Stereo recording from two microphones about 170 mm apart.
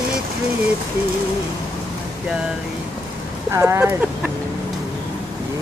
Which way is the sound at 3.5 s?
15° right (ahead or behind).